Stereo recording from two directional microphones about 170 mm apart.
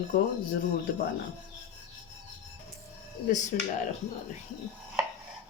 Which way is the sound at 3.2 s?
45° left (ahead or behind).